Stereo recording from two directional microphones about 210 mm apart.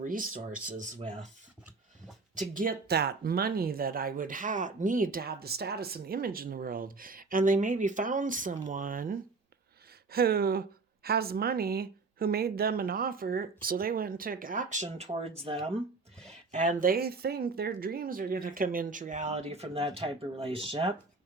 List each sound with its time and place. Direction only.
0.0 s speech: 40° right (ahead or behind)
2.5 s speech: 40° right (ahead or behind)
16.5 s speech: 40° right (ahead or behind)